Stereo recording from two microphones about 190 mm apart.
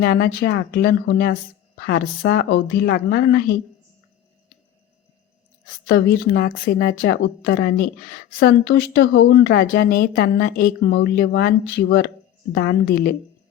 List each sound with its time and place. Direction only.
0.0 s speech: 55° left (ahead or behind)
5.9 s speech: 55° left (ahead or behind)